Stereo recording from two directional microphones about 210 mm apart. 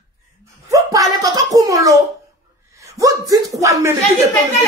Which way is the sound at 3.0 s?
15° right (ahead or behind).